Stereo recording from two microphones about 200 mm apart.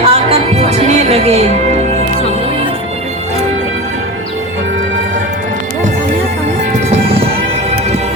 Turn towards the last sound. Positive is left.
turn(degrees=-30)  # may be behind; listen again after turning